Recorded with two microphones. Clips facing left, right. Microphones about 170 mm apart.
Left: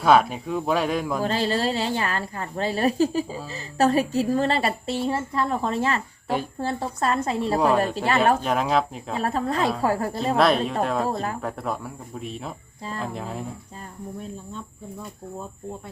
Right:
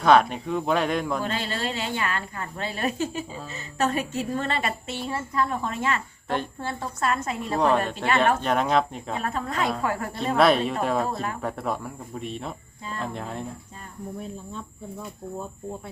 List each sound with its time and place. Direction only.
0.0 s speech: 5° left (ahead or behind)
1.2 s a woman's voice: 35° left (ahead or behind)
6.2 s a woman's voice: 5° left (ahead or behind)
6.6 s a woman's voice: 35° left (ahead or behind)
8.4 s speech: centre (ahead or behind)
9.2 s a woman's voice: 35° left (ahead or behind)
10.3 s speech: centre (ahead or behind)